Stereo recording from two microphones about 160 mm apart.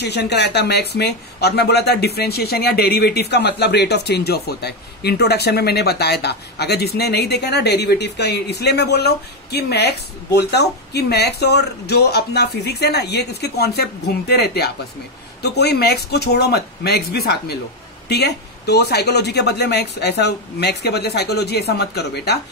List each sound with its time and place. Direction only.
0.0 s speech: 90° left